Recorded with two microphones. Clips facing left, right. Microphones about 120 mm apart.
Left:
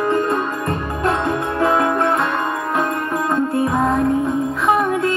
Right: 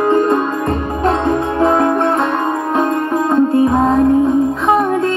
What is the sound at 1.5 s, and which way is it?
Music, 30° right (ahead or behind).